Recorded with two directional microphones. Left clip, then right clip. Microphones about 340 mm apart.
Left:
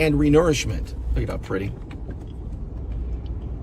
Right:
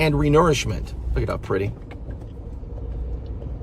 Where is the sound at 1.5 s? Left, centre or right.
Right.